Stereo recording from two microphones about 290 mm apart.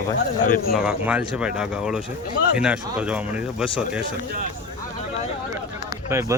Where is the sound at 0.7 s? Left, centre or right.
Centre.